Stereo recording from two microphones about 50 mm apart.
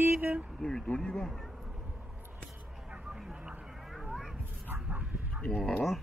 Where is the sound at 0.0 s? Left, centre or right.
Right.